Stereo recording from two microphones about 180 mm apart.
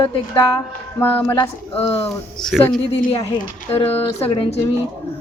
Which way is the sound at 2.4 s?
Centre (ahead or behind).